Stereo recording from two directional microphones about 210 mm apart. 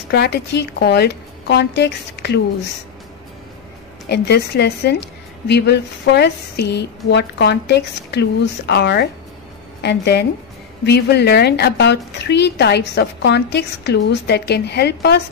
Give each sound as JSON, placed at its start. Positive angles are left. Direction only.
{"t": 0.1, "sound": "a woman's voice", "side_deg": 50}
{"t": 4.1, "sound": "a woman's voice", "side_deg": 50}